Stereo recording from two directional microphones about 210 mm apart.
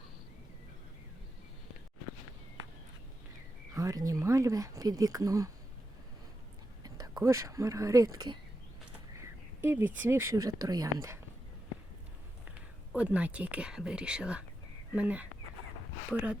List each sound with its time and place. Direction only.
3.7 s speech: 15° right (ahead or behind)
6.8 s speech: 20° right (ahead or behind)
9.6 s speech: 10° right (ahead or behind)
12.9 s speech: 5° right (ahead or behind)